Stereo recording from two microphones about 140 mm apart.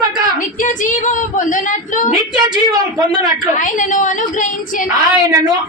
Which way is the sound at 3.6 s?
65° left (ahead or behind).